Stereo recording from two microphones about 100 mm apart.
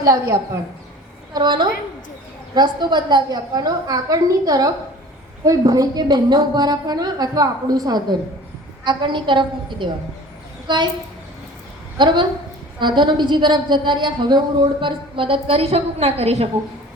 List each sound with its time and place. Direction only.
0.0 s a woman's voice: 35° right (ahead or behind)
1.3 s a woman's voice: 45° right (ahead or behind)
11.9 s a woman's voice: 50° right (ahead or behind); by 16.5 s 90° right